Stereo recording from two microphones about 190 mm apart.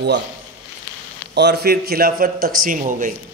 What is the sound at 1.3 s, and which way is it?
Speech, 60° right (ahead or behind).